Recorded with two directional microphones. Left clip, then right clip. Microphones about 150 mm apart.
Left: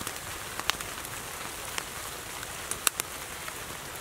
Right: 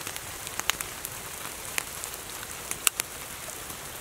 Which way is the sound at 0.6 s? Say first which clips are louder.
Right 1 dB; 10° right (ahead or behind).